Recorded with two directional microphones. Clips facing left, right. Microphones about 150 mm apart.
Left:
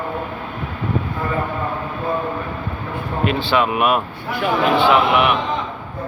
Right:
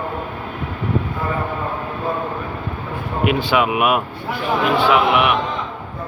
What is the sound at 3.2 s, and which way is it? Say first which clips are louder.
A man's voice: right 1 dB; 10° right (ahead or behind).